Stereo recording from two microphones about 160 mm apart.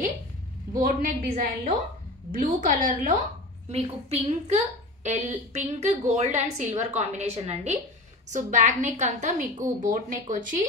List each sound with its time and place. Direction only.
0.8 s a woman's voice: 55° right (ahead or behind)
3.7 s a woman's voice: 40° right (ahead or behind)
8.3 s a woman's voice: 50° right (ahead or behind)